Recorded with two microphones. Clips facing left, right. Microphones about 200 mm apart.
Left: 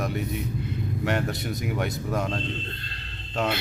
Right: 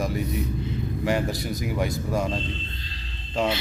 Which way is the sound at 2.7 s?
60° left (ahead or behind).